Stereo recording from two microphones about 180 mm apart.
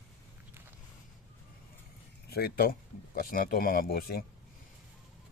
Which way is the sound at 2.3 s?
60° left (ahead or behind).